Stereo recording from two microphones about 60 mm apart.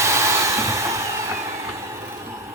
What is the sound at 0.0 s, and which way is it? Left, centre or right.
Hair dryer, right.